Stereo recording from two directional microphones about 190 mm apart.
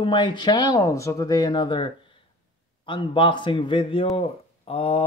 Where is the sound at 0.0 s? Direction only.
25° left (ahead or behind).